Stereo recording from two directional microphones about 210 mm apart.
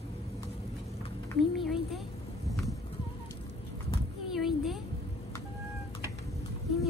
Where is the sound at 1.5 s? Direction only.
Centre (ahead or behind).